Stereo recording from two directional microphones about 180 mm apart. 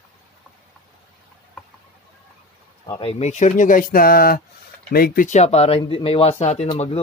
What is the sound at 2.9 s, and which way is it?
Speech, 35° left (ahead or behind).